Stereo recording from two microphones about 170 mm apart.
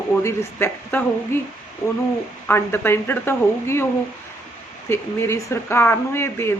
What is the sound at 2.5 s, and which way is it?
A woman's voice, 15° left (ahead or behind).